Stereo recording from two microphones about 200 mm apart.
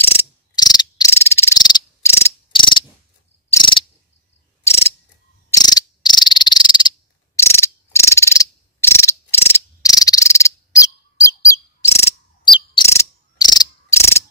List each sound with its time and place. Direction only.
0.1 s cricket: 20° left (ahead or behind)
2.5 s ratchet: 25° left (ahead or behind)
4.6 s mechanisms: 15° left (ahead or behind)
5.5 s cricket: 20° left (ahead or behind)